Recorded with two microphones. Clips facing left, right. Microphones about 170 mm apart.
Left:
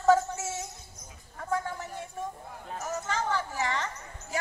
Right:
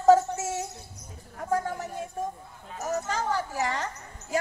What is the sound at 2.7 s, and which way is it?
Speech, 40° right (ahead or behind).